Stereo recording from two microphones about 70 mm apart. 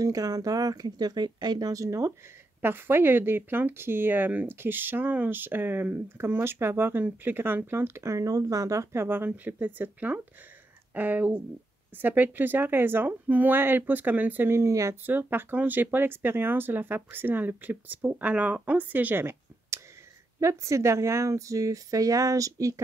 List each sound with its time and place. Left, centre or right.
0.0 s speech: right
2.6 s speech: right
9.0 s speech: right
14.5 s speech: right
15.0 s speech: right
20.3 s speech: right